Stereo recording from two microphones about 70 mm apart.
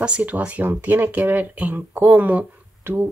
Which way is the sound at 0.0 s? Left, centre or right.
Centre.